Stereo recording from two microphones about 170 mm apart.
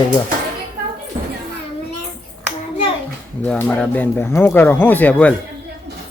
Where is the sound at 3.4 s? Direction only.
10° left (ahead or behind).